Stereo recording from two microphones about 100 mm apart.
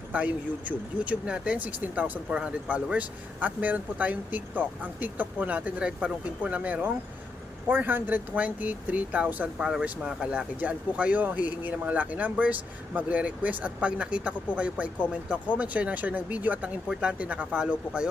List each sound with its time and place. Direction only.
0.1 s speech: 15° right (ahead or behind)